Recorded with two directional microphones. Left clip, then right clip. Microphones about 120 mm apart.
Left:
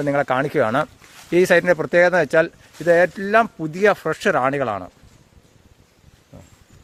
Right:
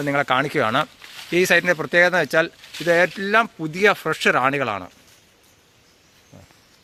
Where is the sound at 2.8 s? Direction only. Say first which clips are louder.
Left 2 dB; 55° left (ahead or behind).